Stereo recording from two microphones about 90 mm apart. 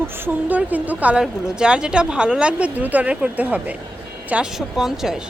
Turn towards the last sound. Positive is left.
turn(degrees=-5)  # may be behind; listen again after turning